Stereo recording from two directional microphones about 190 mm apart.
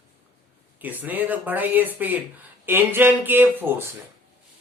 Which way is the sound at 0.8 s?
10° right (ahead or behind).